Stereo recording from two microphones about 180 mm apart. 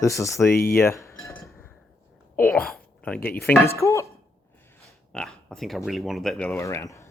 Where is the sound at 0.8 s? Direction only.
15° left (ahead or behind).